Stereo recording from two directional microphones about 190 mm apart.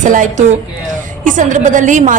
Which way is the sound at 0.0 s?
40° right (ahead or behind).